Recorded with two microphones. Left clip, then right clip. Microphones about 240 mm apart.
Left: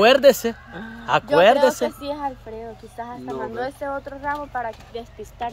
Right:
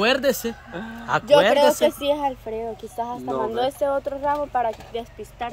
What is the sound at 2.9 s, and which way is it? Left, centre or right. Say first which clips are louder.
Speech: right 4 dB; right.